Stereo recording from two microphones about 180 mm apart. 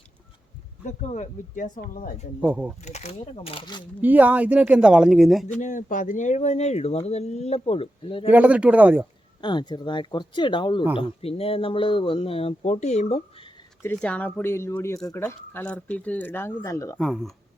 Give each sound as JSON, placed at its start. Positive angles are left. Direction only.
{"t": 0.9, "sound": "speech", "side_deg": 40}
{"t": 2.4, "sound": "speech", "side_deg": -10}
{"t": 2.8, "sound": "speech", "side_deg": 40}
{"t": 4.0, "sound": "speech", "side_deg": -10}
{"t": 5.5, "sound": "speech", "side_deg": 45}
{"t": 8.3, "sound": "speech", "side_deg": -10}
{"t": 9.4, "sound": "speech", "side_deg": 25}
{"t": 13.8, "sound": "speech", "side_deg": 10}
{"t": 17.0, "sound": "speech", "side_deg": 0}